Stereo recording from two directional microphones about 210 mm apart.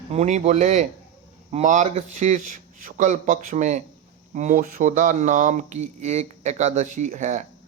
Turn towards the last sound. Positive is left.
turn(degrees=-35)  # may be behind; listen again after turning